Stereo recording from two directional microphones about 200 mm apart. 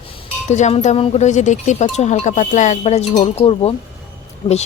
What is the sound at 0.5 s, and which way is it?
Speech, 35° left (ahead or behind).